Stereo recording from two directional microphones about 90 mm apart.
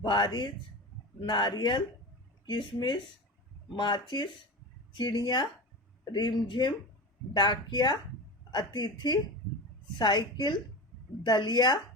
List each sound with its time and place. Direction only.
0.0 s a man's voice: 55° left (ahead or behind)